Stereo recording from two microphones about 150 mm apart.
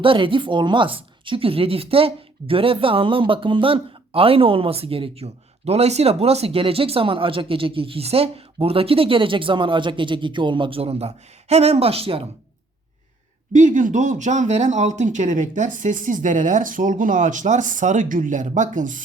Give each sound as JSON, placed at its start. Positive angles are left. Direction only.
{"t": 0.0, "sound": "speech", "side_deg": -35}
{"t": 13.5, "sound": "speech", "side_deg": -55}